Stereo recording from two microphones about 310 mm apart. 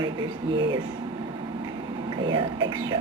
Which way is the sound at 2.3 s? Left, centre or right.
Centre.